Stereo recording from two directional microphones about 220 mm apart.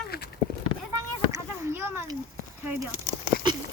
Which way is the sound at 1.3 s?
15° right (ahead or behind).